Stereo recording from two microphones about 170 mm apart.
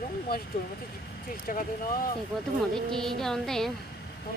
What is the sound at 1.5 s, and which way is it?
Speech, 55° left (ahead or behind).